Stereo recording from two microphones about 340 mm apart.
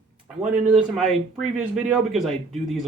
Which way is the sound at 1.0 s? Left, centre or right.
Centre.